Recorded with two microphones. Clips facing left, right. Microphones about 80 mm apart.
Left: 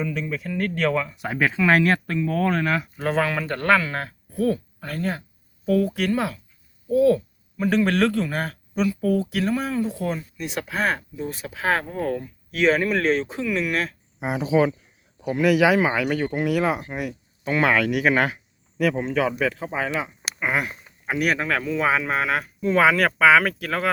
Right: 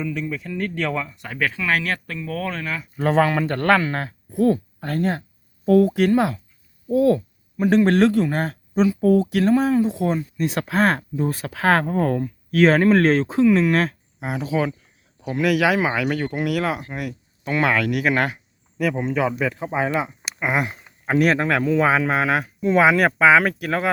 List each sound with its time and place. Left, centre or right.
0.3 s speech: centre
1.0 s speech: centre
3.0 s speech: right
4.8 s speech: right
6.8 s a sound: right
7.6 s speech: centre
10.3 s speech: right
11.4 s speech: right
13.2 s speech: right
14.2 s speech: centre
20.4 s a sound: centre
21.1 s speech: right